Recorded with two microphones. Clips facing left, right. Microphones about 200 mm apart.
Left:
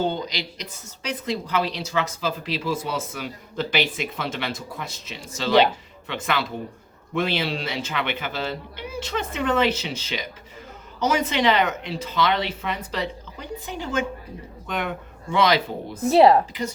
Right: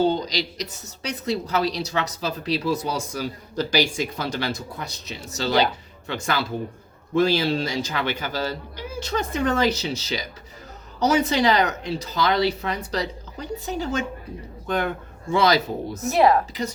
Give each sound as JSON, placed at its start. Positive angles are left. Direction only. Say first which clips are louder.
{"t": 0.0, "sound": "speech", "louder": "right 4 dB", "side_deg": -35}
{"t": 16.0, "sound": "speech", "louder": "left 3 dB", "side_deg": 30}